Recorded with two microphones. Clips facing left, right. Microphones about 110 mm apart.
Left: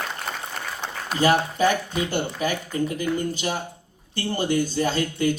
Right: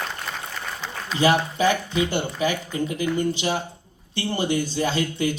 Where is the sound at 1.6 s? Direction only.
45° left (ahead or behind).